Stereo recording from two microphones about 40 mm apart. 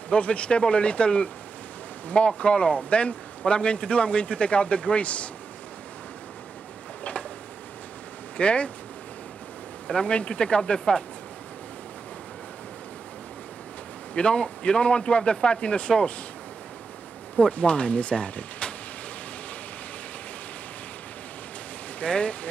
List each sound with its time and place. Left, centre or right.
0.1 s speech: left
8.4 s speech: left
9.8 s speech: left
14.1 s speech: left
17.4 s speech: left
22.0 s speech: left